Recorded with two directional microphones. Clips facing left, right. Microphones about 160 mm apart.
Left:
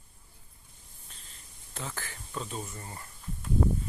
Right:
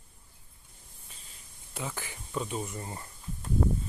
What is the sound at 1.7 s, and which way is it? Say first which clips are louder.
Speech: right 2 dB; 10° right (ahead or behind).